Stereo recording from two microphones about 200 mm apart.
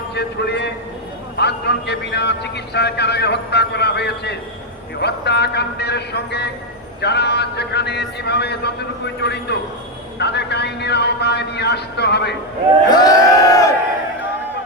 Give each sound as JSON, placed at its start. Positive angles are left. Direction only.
{"t": 0.1, "sound": "a man's voice", "side_deg": 55}
{"t": 12.9, "sound": "crowd", "side_deg": 20}